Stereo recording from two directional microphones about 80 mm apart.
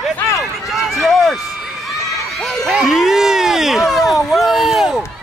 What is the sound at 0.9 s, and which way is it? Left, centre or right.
Speech, centre.